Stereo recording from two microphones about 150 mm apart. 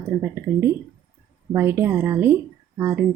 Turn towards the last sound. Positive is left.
turn(degrees=-15)  # may be behind; listen again after turning